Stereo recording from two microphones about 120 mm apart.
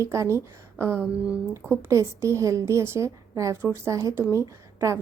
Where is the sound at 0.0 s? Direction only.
25° right (ahead or behind).